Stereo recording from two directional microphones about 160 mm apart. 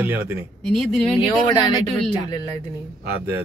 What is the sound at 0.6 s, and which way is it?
Speech, 5° left (ahead or behind).